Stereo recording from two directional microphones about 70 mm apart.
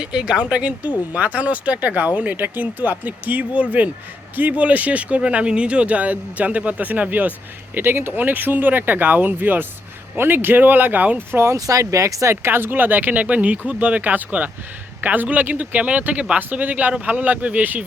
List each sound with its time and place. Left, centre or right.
0.0 s speech: centre
7.8 s speech: right
11.3 s speech: right
11.5 s speech: right